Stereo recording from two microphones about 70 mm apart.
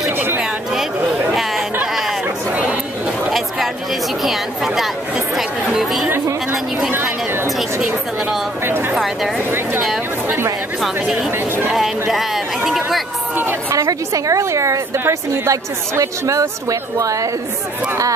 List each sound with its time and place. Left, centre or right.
3.3 s chatter: centre
4.2 s speech: centre
5.3 s chatter: centre
6.9 s a sound: right
7.5 s a sound: centre
8.6 s a sound: right
8.9 s speech: centre
9.5 s speech: right
10.8 s speech: centre
13.4 s a woman's voice: right
13.7 s a woman's voice: right